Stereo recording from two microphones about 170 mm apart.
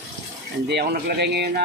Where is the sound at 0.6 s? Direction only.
70° right (ahead or behind).